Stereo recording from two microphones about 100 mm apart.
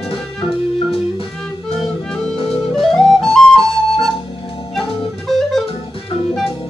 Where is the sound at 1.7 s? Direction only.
5° left (ahead or behind).